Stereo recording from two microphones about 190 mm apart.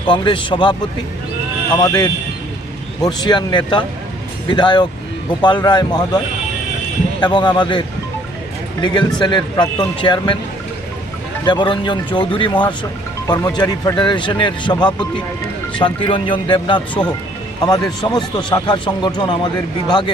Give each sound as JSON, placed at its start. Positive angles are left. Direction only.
{"t": 0.1, "sound": "speech", "side_deg": 25}
{"t": 3.1, "sound": "speech", "side_deg": 20}
{"t": 11.4, "sound": "speech", "side_deg": 25}